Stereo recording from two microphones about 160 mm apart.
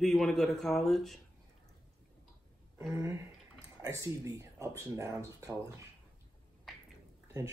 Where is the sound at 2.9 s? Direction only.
20° right (ahead or behind).